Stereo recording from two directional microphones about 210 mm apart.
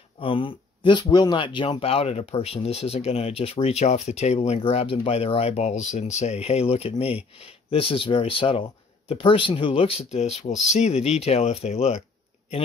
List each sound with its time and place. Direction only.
0.2 s speech: 25° left (ahead or behind)